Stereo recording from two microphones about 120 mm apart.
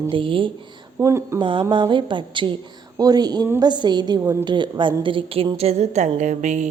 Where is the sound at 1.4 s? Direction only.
40° right (ahead or behind).